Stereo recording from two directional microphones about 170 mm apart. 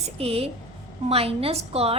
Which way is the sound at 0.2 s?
35° right (ahead or behind).